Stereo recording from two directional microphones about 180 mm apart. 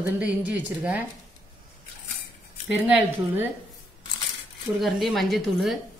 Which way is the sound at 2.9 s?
10° right (ahead or behind).